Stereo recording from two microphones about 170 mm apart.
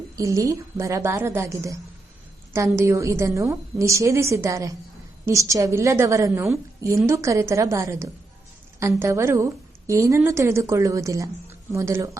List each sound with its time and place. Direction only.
0.2 s a woman's voice: 20° right (ahead or behind)